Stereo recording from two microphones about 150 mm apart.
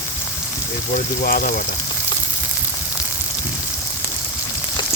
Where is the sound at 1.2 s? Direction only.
75° left (ahead or behind).